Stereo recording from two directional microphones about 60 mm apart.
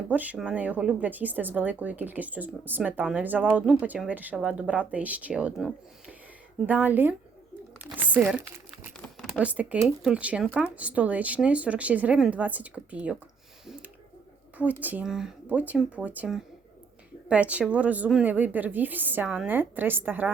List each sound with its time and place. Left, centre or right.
0.1 s speech: right
6.7 s speech: right
7.9 s crumpling: right
9.4 s speech: right
14.6 s speech: right
15.0 s speech: centre
15.4 s a woman's voice: right